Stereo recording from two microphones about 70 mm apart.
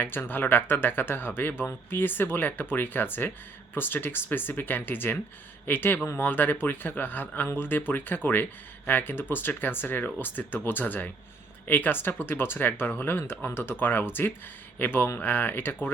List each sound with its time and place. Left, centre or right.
0.0 s speech: left